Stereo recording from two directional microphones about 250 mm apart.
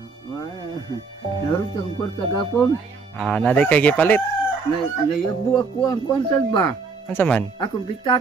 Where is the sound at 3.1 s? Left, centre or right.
Centre.